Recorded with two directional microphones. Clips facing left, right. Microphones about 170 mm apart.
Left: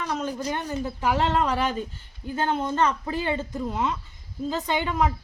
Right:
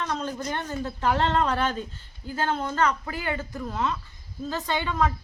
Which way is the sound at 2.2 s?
20° left (ahead or behind).